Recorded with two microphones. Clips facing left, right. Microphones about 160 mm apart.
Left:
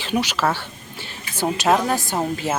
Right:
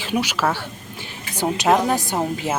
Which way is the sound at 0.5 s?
15° right (ahead or behind).